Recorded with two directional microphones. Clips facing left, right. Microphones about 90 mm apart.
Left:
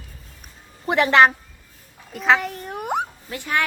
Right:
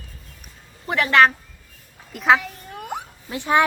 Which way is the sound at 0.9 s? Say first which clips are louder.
Left 1 dB; 25° left (ahead or behind).